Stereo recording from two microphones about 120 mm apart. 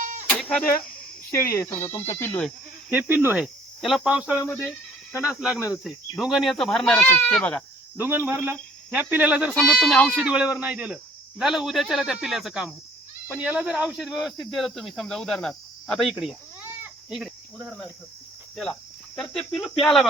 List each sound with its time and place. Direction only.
0.0 s sheep: 90° right
0.3 s a sound: 5° left (ahead or behind)
1.3 s speech: 20° left (ahead or behind)
2.9 s speech: 15° right (ahead or behind)
3.8 s speech: centre (ahead or behind)
4.4 s speech: 20° left (ahead or behind)
5.1 s speech: 10° right (ahead or behind)
5.5 s speech: 25° left (ahead or behind)
5.8 s speech: centre (ahead or behind)
7.9 s speech: 15° right (ahead or behind)
9.5 s speech: 5° left (ahead or behind)
18.5 s speech: 5° left (ahead or behind)